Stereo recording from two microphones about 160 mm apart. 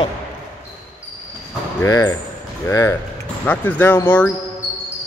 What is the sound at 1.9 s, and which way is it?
Speech, 25° left (ahead or behind).